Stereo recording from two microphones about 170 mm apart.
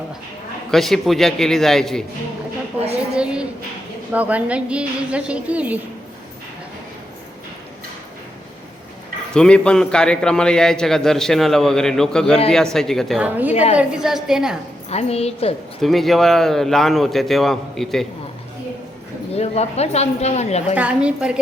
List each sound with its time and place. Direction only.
0.7 s a man's voice: centre (ahead or behind)
4.1 s a woman's voice: 10° right (ahead or behind)
9.3 s a man's voice: 5° left (ahead or behind)
13.5 s speech: 40° left (ahead or behind)
13.7 s a man's voice: 5° right (ahead or behind)
14.8 s speech: 40° left (ahead or behind)
15.8 s a man's voice: centre (ahead or behind)
19.3 s speech: 40° left (ahead or behind)
20.7 s a woman's voice: 5° right (ahead or behind)